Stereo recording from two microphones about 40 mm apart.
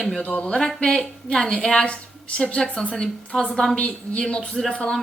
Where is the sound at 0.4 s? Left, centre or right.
Centre.